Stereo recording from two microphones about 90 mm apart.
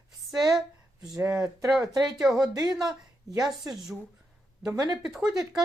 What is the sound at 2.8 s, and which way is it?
Speech, 40° right (ahead or behind).